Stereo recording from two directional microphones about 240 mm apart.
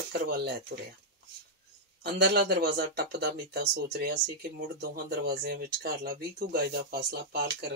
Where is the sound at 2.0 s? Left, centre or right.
Right.